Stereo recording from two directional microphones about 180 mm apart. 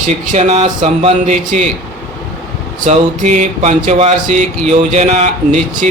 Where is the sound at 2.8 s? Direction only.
40° right (ahead or behind).